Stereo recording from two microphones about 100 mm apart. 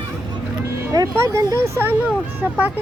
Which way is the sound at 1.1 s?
30° right (ahead or behind).